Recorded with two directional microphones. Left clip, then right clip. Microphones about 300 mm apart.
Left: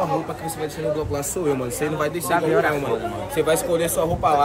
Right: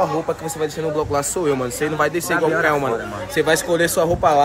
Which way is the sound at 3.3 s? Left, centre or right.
Right.